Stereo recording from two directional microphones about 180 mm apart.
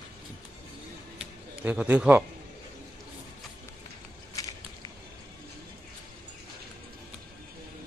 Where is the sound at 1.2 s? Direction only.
10° right (ahead or behind).